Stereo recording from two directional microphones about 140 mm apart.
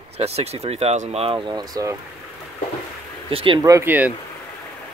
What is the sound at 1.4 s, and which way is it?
Speech, 30° right (ahead or behind).